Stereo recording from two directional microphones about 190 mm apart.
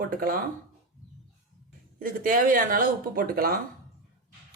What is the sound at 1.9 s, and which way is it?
Speech, 50° right (ahead or behind).